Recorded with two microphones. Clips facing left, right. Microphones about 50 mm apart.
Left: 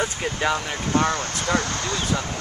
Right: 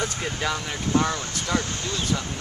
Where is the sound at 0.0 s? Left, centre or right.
Left.